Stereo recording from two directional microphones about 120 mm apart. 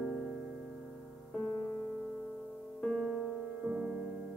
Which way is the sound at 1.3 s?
10° left (ahead or behind).